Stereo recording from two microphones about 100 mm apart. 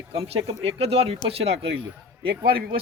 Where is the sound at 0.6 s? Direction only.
85° right.